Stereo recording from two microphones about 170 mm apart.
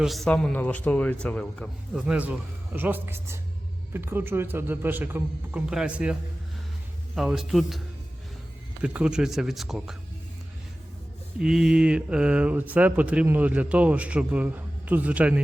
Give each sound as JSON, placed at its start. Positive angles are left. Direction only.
{"t": 0.0, "sound": "a man's voice", "side_deg": 0}
{"t": 7.2, "sound": "a man's voice", "side_deg": 0}
{"t": 8.8, "sound": "a man's voice", "side_deg": -5}
{"t": 11.3, "sound": "speech", "side_deg": -5}